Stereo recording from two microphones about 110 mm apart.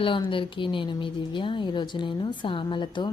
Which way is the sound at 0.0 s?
50° left (ahead or behind).